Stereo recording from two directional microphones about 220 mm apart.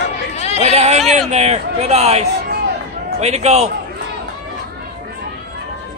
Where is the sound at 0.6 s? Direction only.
30° right (ahead or behind).